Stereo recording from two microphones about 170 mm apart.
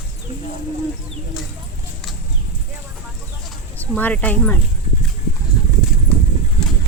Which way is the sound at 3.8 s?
10° left (ahead or behind).